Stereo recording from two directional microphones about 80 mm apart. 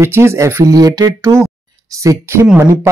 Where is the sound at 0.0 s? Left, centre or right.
Right.